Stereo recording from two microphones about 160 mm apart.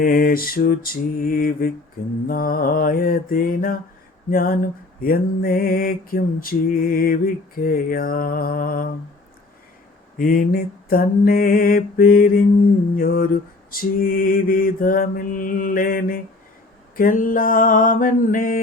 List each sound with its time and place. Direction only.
0.0 s mantra: 65° left (ahead or behind)
10.2 s mantra: 65° left (ahead or behind)